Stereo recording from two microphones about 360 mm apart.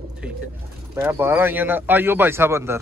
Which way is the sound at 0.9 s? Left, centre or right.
Centre.